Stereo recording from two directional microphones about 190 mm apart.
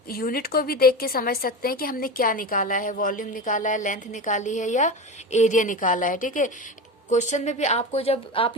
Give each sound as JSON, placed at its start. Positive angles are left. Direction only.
{"t": 0.1, "sound": "a woman's voice", "side_deg": 50}